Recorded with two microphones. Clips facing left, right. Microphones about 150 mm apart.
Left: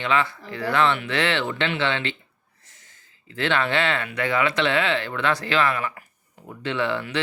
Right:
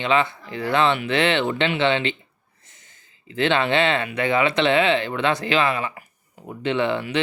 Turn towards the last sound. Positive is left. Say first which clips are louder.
# right 3 dB
turn(degrees=-20)  # may be behind; listen again after turning